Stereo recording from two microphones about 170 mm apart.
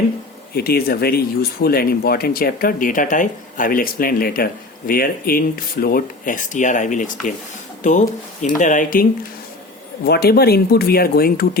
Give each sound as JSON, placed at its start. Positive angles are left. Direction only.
{"t": 0.5, "sound": "speech", "side_deg": 65}
{"t": 10.1, "sound": "speech", "side_deg": 65}